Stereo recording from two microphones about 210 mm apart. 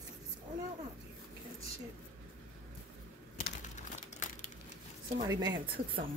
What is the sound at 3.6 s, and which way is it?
Crumpling, 35° left (ahead or behind).